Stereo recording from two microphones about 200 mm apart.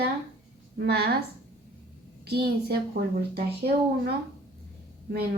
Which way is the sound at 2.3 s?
50° right (ahead or behind).